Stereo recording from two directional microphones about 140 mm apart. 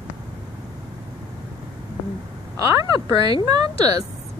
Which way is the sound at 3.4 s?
25° right (ahead or behind).